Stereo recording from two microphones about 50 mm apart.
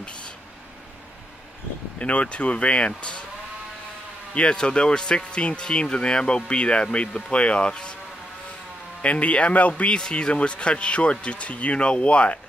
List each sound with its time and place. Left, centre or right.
0.0 s vehicle: left
2.0 s speech: left
4.3 s speech: centre
9.0 s speech: left
9.8 s speech: centre